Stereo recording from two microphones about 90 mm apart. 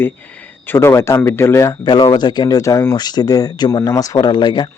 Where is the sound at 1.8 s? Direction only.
55° left (ahead or behind).